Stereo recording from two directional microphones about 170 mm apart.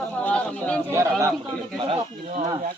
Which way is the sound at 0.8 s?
15° right (ahead or behind).